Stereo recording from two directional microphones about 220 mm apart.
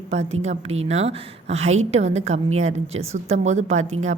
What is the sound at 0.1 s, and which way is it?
A woman's voice, 30° right (ahead or behind).